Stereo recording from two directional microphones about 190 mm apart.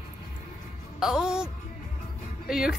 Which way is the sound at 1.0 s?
Centre (ahead or behind).